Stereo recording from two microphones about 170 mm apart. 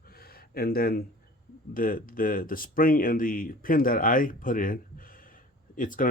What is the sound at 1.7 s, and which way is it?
Speech, 55° left (ahead or behind).